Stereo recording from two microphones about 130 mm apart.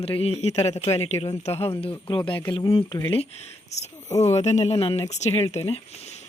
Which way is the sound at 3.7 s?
60° left (ahead or behind).